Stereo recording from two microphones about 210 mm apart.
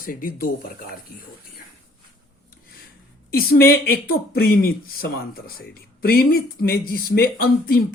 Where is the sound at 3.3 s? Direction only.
45° left (ahead or behind).